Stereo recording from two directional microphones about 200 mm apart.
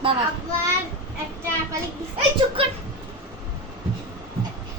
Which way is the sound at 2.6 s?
30° right (ahead or behind).